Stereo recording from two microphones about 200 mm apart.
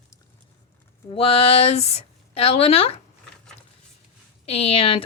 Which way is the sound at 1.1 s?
25° left (ahead or behind).